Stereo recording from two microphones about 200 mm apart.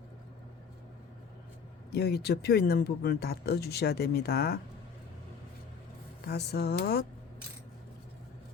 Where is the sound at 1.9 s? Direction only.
55° left (ahead or behind).